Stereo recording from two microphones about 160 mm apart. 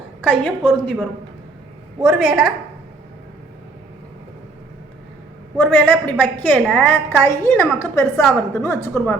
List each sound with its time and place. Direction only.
0.2 s a woman's voice: 5° left (ahead or behind)
2.0 s a woman's voice: centre (ahead or behind)
5.5 s a woman's voice: 10° left (ahead or behind)